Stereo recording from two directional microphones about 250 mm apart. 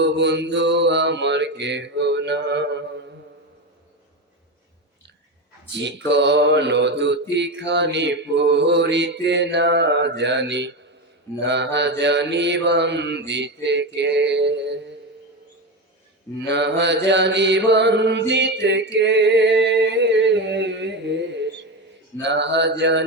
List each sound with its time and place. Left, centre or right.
0.0 s mantra: right
5.7 s mantra: right
16.5 s mantra: right